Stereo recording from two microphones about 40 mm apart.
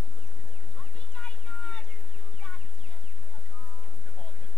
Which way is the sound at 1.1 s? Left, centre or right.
Left.